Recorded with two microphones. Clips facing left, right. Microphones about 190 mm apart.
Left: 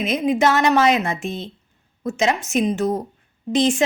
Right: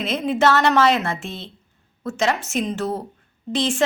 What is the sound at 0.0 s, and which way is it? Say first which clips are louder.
A woman's voice: left 1 dB; 15° left (ahead or behind).